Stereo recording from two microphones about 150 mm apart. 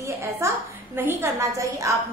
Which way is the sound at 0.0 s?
20° right (ahead or behind).